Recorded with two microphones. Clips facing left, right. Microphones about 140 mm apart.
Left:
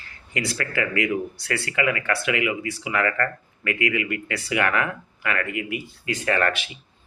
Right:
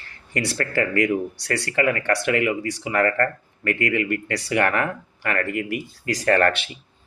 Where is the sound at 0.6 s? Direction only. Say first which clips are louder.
Right 4 dB; 40° right (ahead or behind).